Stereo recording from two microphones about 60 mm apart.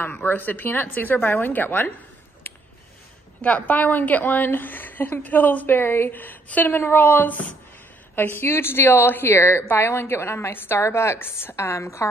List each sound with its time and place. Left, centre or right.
0.1 s a woman's voice: left
2.4 s a sound: left
3.4 s a woman's voice: left
5.8 s a woman's voice: left